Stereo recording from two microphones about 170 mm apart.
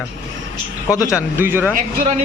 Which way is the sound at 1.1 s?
10° right (ahead or behind).